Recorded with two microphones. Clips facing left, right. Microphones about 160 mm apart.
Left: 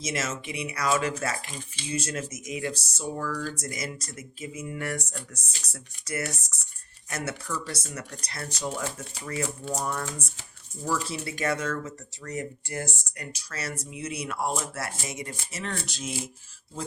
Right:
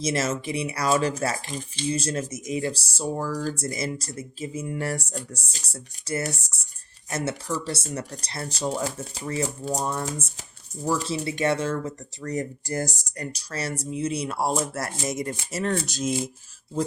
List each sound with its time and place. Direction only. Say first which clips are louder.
0.0 s speech: right 6 dB; 35° right (ahead or behind)